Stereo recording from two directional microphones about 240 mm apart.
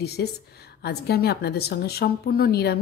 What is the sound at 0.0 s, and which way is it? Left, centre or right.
A woman's voice, left.